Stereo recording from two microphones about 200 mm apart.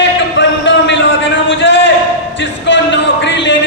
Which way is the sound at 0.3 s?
65° left (ahead or behind).